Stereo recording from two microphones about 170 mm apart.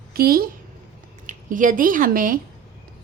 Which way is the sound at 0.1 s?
60° right (ahead or behind).